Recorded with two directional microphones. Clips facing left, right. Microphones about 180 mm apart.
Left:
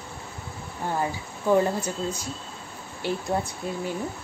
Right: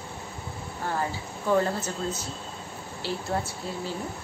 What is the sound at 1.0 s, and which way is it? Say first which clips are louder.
A woman's voice: left 2 dB; 15° left (ahead or behind).